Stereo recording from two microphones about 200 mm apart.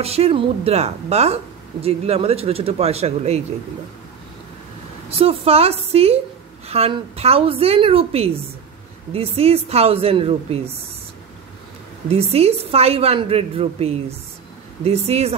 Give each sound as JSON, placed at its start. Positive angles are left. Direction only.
{"t": 0.0, "sound": "a woman's voice", "side_deg": -30}
{"t": 5.1, "sound": "a woman's voice", "side_deg": -30}
{"t": 12.1, "sound": "a woman's voice", "side_deg": -30}